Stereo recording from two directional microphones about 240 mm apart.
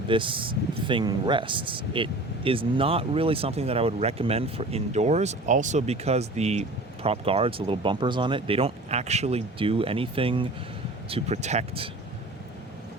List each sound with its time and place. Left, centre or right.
0.1 s speech: right